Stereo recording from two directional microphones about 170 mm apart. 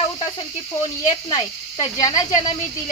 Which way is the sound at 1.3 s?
25° left (ahead or behind).